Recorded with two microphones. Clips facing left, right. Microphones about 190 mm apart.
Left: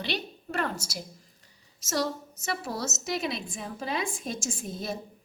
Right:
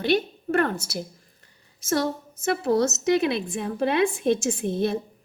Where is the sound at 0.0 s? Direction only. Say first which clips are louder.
Right 11 dB; 50° right (ahead or behind).